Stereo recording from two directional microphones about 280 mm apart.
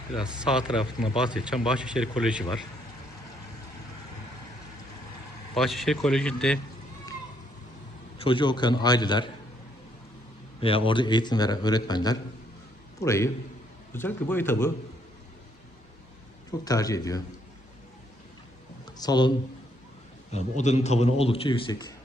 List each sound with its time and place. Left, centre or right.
0.1 s speech: centre
5.5 s speech: centre
8.2 s a man's voice: centre
10.6 s a man's voice: centre
16.6 s a man's voice: centre
18.9 s speech: centre
20.3 s a man's voice: left